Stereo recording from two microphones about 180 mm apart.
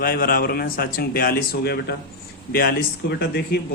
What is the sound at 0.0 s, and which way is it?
Speech, 55° left (ahead or behind).